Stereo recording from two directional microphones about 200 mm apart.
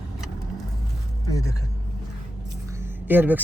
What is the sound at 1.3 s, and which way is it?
Speech, 15° left (ahead or behind).